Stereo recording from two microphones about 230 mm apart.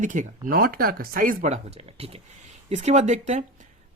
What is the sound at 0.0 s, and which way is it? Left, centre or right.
Speech, right.